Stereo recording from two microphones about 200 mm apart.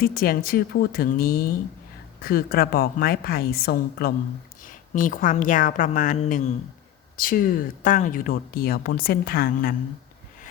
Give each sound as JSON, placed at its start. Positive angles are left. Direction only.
{"t": 0.0, "sound": "a woman's voice", "side_deg": 50}